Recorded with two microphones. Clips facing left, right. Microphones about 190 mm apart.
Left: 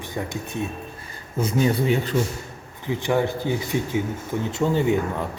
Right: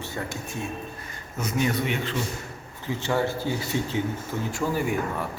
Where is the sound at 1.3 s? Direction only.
30° left (ahead or behind).